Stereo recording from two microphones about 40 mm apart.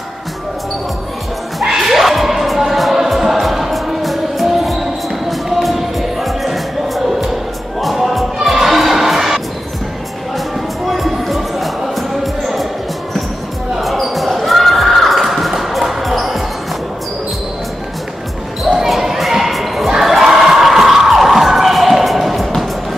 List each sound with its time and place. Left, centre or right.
1.6 s music: centre
7.8 s music: centre
10.9 s music: centre
13.7 s basketball bounce: centre
18.9 s crowd: centre